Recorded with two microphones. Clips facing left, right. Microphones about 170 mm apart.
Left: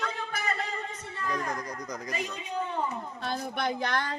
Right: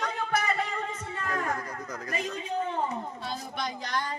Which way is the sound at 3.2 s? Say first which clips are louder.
Left 3 dB; 60° left (ahead or behind).